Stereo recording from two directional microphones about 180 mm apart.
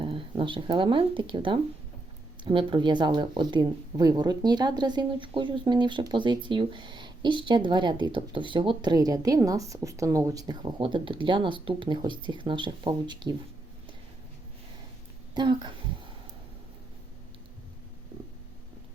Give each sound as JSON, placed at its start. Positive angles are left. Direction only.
{"t": 0.0, "sound": "speech", "side_deg": -30}
{"t": 15.4, "sound": "speech", "side_deg": -25}